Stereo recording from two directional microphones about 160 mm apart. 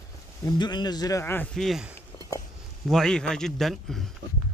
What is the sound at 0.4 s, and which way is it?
Speech, 25° left (ahead or behind).